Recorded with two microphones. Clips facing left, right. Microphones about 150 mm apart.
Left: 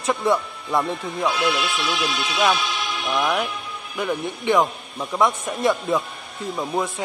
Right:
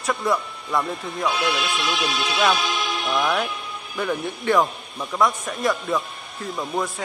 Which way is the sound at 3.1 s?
10° left (ahead or behind).